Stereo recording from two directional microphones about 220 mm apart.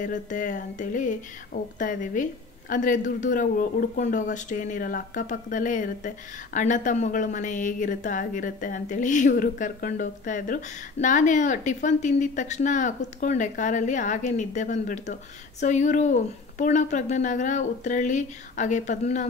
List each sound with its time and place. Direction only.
0.0 s speech: 35° left (ahead or behind)